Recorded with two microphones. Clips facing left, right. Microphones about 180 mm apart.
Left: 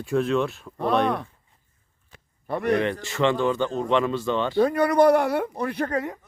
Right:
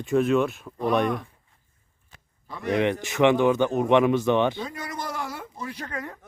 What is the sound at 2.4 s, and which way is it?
Speech, 60° left (ahead or behind).